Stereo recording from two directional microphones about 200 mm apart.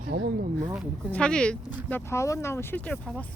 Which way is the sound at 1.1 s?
5° left (ahead or behind).